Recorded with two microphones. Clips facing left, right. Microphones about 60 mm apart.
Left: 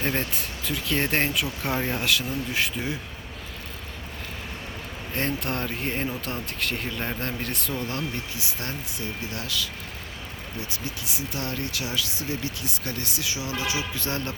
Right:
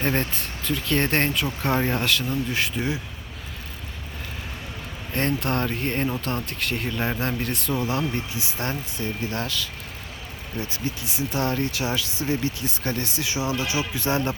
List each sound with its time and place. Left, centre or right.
0.2 s speech: centre
5.1 s speech: centre
7.9 s speech: right
10.7 s speech: right